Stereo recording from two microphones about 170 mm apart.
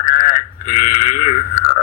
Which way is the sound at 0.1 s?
55° left (ahead or behind).